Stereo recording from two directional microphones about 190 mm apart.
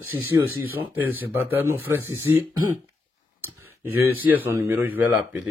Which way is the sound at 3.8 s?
10° right (ahead or behind).